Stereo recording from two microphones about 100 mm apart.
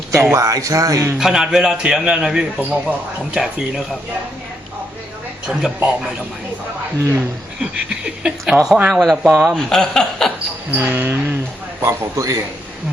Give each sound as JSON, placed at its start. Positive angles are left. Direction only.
{"t": 0.1, "sound": "speech", "side_deg": -30}
{"t": 1.2, "sound": "a man's voice", "side_deg": -10}
{"t": 5.5, "sound": "a man's voice", "side_deg": -10}
{"t": 7.6, "sound": "a man's voice", "side_deg": -10}
{"t": 9.3, "sound": "a man's voice", "side_deg": -15}
{"t": 9.6, "sound": "chuckle", "side_deg": 5}
{"t": 10.7, "sound": "a man's voice", "side_deg": -20}